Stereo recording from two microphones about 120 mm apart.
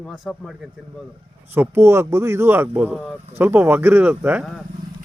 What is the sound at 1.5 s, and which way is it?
A man's voice, 20° right (ahead or behind).